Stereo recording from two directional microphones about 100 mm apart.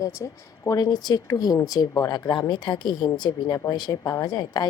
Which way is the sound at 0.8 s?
45° left (ahead or behind).